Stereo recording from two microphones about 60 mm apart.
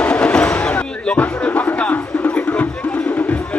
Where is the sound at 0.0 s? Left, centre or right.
Centre.